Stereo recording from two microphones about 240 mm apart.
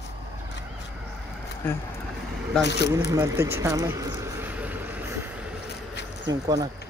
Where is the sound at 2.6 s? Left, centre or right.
Left.